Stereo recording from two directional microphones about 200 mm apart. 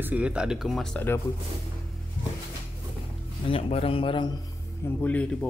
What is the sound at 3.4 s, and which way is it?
Speech, 30° left (ahead or behind).